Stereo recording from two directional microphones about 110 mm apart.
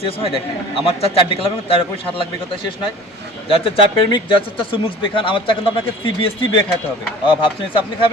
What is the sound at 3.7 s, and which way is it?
Speech, 50° left (ahead or behind).